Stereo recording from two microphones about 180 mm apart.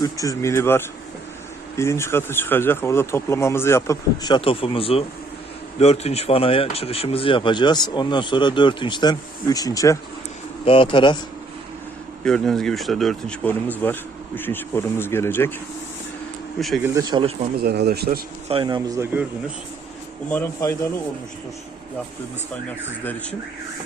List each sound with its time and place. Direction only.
0.0 s speech: 20° left (ahead or behind)
10.7 s speech: 30° left (ahead or behind)
12.2 s speech: 5° left (ahead or behind)
16.6 s speech: centre (ahead or behind)
16.8 s speech: 20° right (ahead or behind)
17.6 s speech: 60° right (ahead or behind)
18.4 s speech: 25° right (ahead or behind)
20.3 s speech: 15° left (ahead or behind)